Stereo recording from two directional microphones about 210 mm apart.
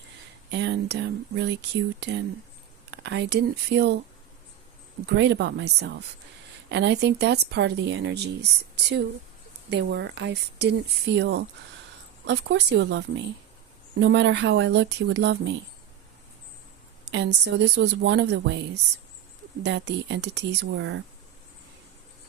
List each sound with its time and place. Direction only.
0.5 s speech: 55° right (ahead or behind)
5.0 s speech: 55° right (ahead or behind)
17.1 s speech: 55° right (ahead or behind)
19.6 s speech: 55° right (ahead or behind)